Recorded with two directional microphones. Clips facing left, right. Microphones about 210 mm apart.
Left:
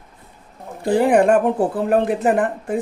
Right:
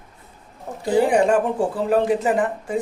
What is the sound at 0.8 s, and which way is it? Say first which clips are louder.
Speech: left 2 dB; 55° left (ahead or behind).